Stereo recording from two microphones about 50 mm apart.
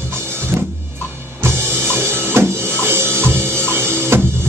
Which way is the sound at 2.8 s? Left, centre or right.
Right.